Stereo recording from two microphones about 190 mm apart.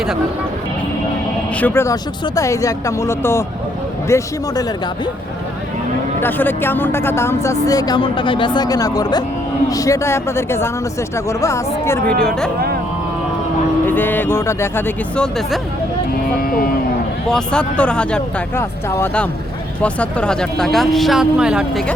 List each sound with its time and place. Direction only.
1.5 s speech: 10° left (ahead or behind)
6.1 s speech: 10° left (ahead or behind)
13.8 s speech: 10° left (ahead or behind)
17.2 s speech: 5° left (ahead or behind)